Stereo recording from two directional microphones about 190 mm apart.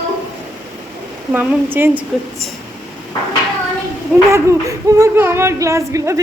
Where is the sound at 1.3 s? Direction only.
10° right (ahead or behind).